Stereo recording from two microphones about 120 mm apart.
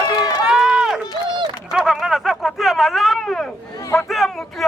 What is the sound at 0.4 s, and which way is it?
Run, 5° right (ahead or behind).